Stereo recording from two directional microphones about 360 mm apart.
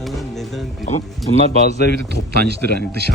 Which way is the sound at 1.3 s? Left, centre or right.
Centre.